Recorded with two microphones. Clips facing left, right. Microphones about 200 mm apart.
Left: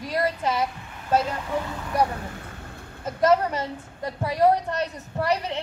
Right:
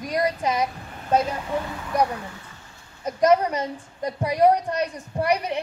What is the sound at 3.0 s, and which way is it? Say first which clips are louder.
A woman's voice: right 2 dB; 15° right (ahead or behind).